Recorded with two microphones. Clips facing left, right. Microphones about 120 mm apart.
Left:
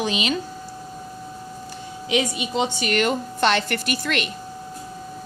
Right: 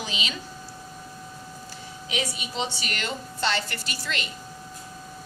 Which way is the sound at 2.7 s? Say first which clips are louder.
Left 11 dB; 50° left (ahead or behind).